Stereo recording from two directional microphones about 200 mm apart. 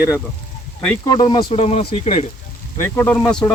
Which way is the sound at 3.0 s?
10° left (ahead or behind).